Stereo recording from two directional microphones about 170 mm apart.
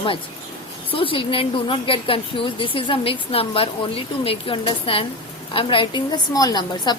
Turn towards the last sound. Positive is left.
turn(degrees=25)  # may be behind; listen again after turning